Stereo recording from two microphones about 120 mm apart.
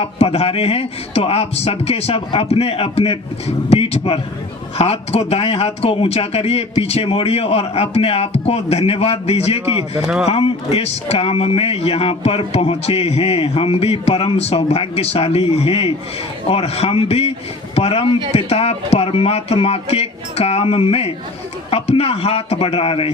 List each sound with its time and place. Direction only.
0.0 s speech: 55° left (ahead or behind)